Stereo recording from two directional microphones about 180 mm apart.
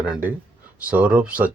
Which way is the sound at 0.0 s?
10° right (ahead or behind).